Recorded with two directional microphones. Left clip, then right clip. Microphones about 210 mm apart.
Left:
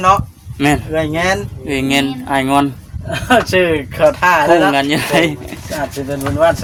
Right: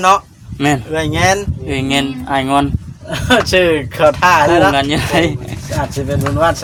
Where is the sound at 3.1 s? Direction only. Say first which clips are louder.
Even; 40° right (ahead or behind).